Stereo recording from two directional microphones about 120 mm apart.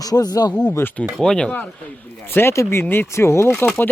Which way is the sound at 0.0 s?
30° left (ahead or behind).